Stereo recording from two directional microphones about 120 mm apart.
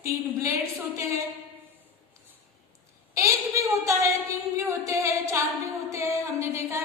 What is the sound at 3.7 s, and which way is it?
A woman's voice, 25° right (ahead or behind).